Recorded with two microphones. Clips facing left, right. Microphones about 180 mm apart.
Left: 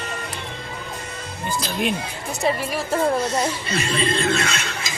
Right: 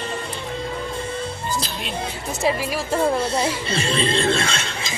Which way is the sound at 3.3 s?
30° right (ahead or behind).